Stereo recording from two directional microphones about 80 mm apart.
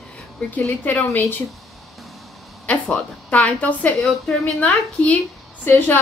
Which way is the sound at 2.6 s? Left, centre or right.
Centre.